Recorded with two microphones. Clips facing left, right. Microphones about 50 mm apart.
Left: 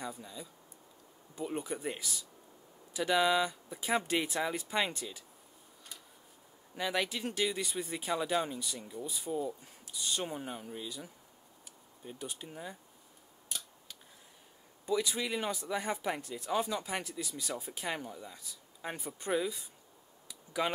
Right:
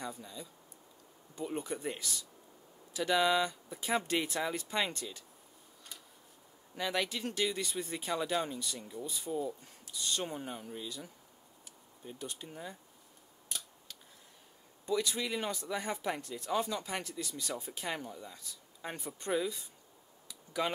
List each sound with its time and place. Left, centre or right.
0.0 s speech: centre
6.7 s speech: centre
13.5 s scissors: centre
14.9 s speech: centre
20.2 s a sound: centre